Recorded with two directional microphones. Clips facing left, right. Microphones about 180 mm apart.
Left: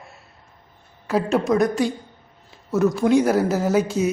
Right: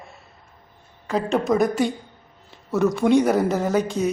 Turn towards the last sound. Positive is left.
turn(degrees=5)  # may be behind; listen again after turning